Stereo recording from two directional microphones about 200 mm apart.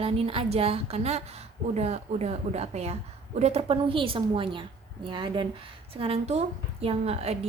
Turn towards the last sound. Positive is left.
turn(degrees=-30)  # may be behind; listen again after turning